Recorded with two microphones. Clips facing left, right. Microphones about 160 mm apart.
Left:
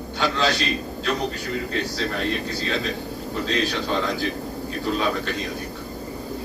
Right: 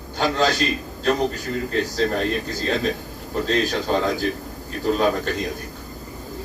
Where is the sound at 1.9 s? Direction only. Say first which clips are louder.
Right 5 dB; 45° right (ahead or behind).